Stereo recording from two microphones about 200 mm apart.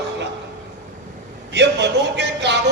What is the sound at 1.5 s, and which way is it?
A man's voice, 60° right (ahead or behind).